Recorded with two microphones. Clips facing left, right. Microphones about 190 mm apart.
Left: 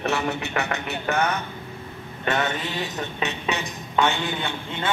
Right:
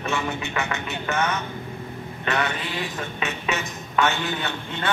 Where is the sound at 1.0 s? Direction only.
35° left (ahead or behind).